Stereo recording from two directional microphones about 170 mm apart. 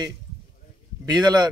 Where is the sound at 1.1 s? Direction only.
25° right (ahead or behind).